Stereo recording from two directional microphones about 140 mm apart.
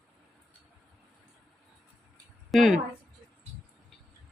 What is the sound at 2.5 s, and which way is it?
Speech, centre (ahead or behind).